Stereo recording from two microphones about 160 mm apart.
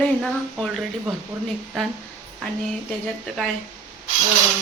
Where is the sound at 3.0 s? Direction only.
Centre (ahead or behind).